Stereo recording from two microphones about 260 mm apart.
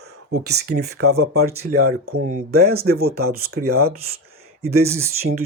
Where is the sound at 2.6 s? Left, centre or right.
Right.